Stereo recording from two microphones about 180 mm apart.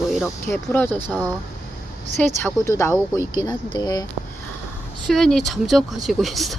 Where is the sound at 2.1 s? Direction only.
40° right (ahead or behind).